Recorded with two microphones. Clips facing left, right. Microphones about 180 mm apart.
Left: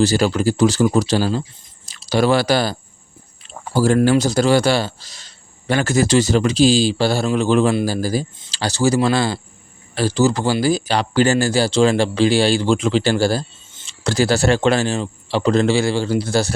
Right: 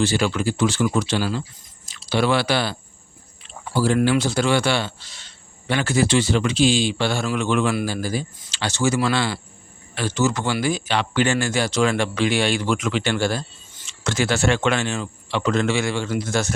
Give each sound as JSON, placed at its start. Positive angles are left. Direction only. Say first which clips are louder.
{"t": 0.0, "sound": "speech", "louder": "left 5 dB", "side_deg": 40}